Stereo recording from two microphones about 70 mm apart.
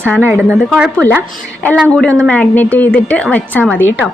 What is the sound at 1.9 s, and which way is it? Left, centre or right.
Speech, centre.